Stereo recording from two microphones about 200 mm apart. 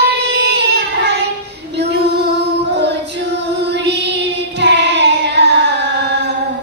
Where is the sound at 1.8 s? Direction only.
60° right (ahead or behind).